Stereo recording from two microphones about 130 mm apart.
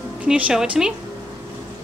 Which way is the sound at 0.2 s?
10° right (ahead or behind).